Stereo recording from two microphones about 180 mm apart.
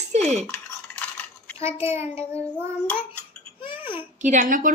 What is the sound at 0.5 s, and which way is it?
Cutlery, 10° left (ahead or behind).